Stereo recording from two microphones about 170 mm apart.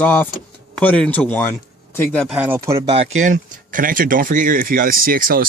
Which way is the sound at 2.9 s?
45° right (ahead or behind).